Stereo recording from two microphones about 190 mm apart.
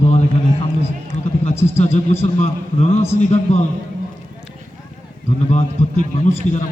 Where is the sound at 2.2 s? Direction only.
35° left (ahead or behind).